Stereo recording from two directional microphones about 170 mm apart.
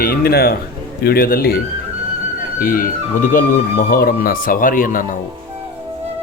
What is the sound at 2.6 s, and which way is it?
Speech, 55° left (ahead or behind).